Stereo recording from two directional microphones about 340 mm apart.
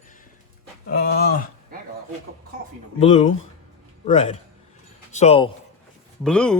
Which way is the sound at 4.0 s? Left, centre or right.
Centre.